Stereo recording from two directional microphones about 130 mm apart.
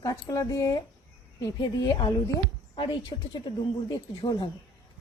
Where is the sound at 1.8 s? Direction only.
30° left (ahead or behind).